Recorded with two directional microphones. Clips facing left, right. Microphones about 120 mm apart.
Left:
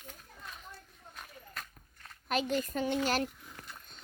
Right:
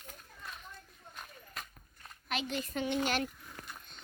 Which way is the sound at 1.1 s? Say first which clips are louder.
Left 1 dB; centre (ahead or behind).